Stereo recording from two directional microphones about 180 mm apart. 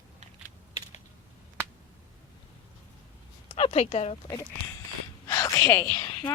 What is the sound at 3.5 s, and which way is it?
Speech, 35° left (ahead or behind).